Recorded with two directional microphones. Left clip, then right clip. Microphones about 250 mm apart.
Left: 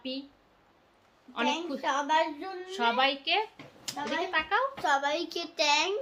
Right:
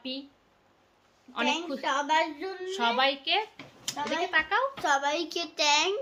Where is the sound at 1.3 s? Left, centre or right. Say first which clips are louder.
Right 1 dB; centre.